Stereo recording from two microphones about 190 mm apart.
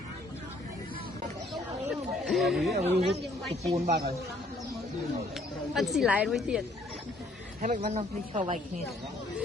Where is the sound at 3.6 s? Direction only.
35° right (ahead or behind).